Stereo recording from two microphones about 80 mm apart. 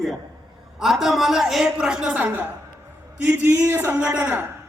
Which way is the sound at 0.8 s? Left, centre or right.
Centre.